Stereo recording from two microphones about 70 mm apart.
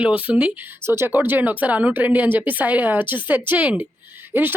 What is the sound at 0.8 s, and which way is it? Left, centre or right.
Speech, right.